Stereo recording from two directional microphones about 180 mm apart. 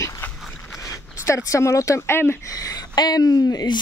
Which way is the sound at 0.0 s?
15° left (ahead or behind).